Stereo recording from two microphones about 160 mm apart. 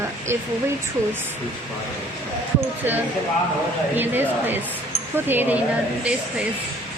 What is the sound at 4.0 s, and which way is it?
Speech, 10° right (ahead or behind).